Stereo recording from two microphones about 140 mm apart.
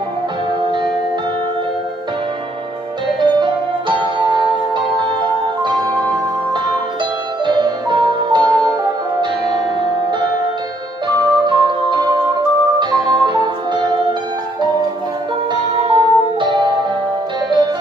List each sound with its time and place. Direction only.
3.2 s music: 30° right (ahead or behind)
5.6 s music: 30° right (ahead or behind)
7.4 s music: 30° right (ahead or behind)
11.1 s music: 35° right (ahead or behind)
15.8 s music: 40° right (ahead or behind)